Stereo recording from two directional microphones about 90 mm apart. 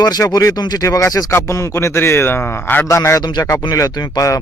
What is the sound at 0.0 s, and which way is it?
Speech, 45° left (ahead or behind).